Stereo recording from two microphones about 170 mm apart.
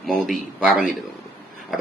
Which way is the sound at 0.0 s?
Centre (ahead or behind).